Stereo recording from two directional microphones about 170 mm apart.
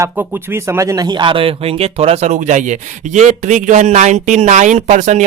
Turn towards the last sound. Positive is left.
turn(degrees=-45)  # may be behind; listen again after turning